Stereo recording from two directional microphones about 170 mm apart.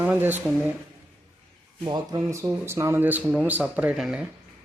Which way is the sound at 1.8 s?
25° right (ahead or behind).